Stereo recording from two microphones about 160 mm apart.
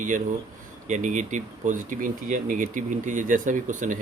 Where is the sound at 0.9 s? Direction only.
50° right (ahead or behind).